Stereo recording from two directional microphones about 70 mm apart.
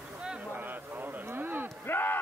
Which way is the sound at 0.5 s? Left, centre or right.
Right.